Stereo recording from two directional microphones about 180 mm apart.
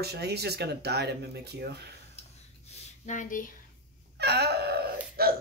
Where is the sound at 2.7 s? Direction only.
45° left (ahead or behind).